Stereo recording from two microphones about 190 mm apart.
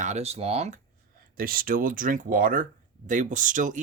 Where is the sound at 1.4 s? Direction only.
50° right (ahead or behind).